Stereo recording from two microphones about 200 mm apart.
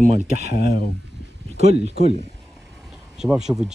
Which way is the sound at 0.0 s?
35° right (ahead or behind).